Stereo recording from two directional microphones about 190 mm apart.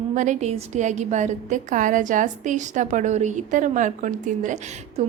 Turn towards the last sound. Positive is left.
turn(degrees=-40)  # may be behind; listen again after turning